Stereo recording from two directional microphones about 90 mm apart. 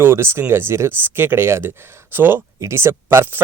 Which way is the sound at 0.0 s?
30° right (ahead or behind).